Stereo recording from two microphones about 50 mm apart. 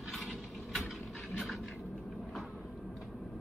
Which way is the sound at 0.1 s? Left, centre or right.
Centre.